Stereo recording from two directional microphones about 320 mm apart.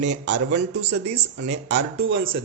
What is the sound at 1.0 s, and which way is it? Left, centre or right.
Speech, centre.